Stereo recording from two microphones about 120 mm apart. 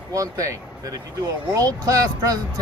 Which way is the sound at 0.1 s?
30° right (ahead or behind).